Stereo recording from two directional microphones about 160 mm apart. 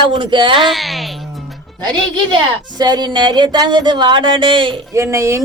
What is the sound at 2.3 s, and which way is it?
Speech, 25° right (ahead or behind).